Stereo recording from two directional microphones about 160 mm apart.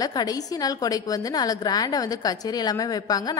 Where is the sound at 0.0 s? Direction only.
25° left (ahead or behind).